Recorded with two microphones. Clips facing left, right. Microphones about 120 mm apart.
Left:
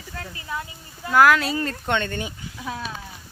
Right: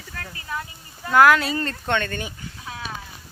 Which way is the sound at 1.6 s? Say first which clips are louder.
Even; 10° left (ahead or behind).